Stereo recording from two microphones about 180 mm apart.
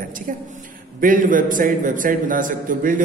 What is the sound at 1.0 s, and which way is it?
A man's voice, 50° right (ahead or behind).